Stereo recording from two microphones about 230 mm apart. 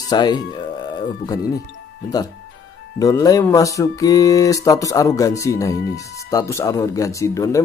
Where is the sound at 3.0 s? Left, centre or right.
Centre.